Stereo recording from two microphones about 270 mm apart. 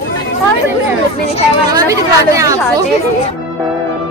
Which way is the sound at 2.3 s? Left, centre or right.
Centre.